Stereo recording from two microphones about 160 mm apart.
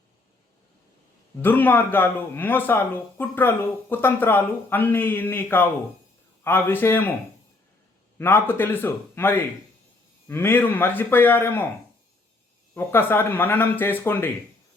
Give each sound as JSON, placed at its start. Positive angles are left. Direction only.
{"t": 1.4, "sound": "speech", "side_deg": 10}
{"t": 8.2, "sound": "speech", "side_deg": 15}
{"t": 12.7, "sound": "speech", "side_deg": 15}